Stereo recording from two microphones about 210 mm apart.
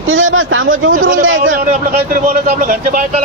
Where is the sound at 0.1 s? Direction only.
70° right (ahead or behind).